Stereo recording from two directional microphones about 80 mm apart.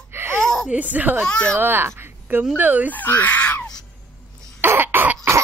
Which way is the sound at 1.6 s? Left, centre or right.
Right.